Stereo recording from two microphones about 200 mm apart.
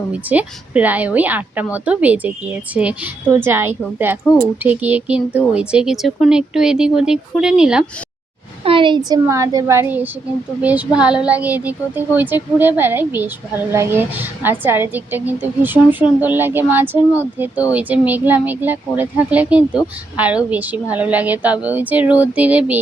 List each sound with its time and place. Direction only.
0.1 s speech: 5° right (ahead or behind)
4.2 s speech: 15° left (ahead or behind)
4.6 s speech: 10° right (ahead or behind)
8.6 s speech: 25° right (ahead or behind); by 22.8 s 5° right (ahead or behind)